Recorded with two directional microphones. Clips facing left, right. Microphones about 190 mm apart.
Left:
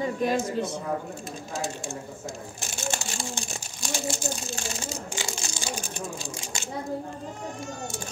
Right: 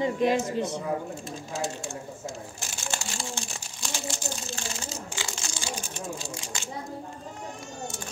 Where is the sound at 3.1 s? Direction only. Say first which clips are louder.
Left 2 dB; 15° left (ahead or behind).